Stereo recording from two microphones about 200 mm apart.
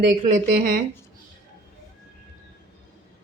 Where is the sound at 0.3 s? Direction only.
40° right (ahead or behind).